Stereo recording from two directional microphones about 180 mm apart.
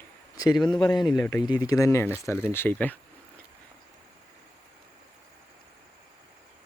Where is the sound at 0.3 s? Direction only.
20° left (ahead or behind).